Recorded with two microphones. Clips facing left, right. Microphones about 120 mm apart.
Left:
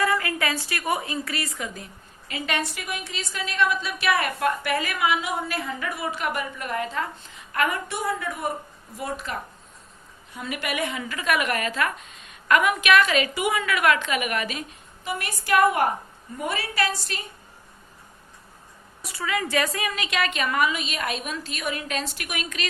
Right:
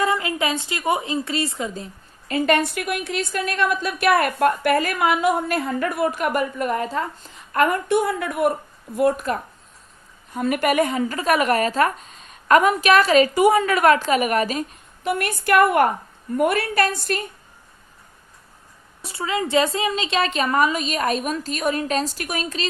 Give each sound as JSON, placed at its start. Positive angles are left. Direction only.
{"t": 0.0, "sound": "a woman's voice", "side_deg": -20}
{"t": 2.2, "sound": "a woman's voice", "side_deg": -45}
{"t": 15.0, "sound": "a woman's voice", "side_deg": -60}
{"t": 19.0, "sound": "a woman's voice", "side_deg": -25}